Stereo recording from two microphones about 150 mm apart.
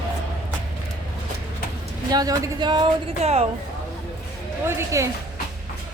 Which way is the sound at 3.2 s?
45° right (ahead or behind).